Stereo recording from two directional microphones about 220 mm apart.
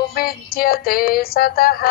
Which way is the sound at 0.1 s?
45° left (ahead or behind).